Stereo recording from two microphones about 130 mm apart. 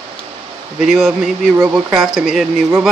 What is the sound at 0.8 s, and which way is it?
Speech, centre (ahead or behind).